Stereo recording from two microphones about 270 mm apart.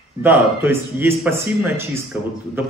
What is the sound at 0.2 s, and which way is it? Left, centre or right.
A man's voice, centre.